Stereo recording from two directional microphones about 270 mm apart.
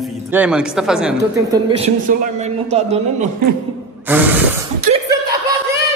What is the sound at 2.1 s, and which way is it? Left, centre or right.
A woman's voice, right.